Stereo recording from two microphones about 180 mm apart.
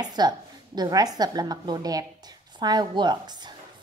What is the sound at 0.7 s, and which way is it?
A woman's voice, 20° right (ahead or behind).